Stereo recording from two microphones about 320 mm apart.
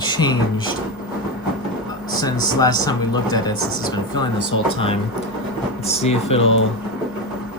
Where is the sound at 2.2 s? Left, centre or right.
Centre.